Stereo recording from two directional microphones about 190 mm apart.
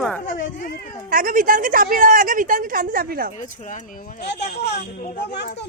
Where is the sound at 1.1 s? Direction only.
45° right (ahead or behind).